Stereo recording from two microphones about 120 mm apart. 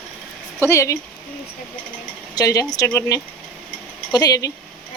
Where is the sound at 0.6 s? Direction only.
25° left (ahead or behind).